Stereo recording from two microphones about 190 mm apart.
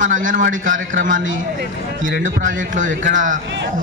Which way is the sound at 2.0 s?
80° right.